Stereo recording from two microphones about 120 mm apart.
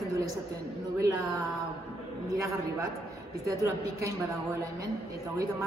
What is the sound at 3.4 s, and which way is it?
Speech, 25° right (ahead or behind).